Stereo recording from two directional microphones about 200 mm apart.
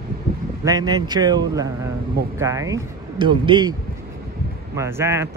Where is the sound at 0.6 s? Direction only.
20° right (ahead or behind).